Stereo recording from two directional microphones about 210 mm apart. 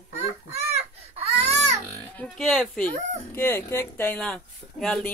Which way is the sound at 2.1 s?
Centre (ahead or behind).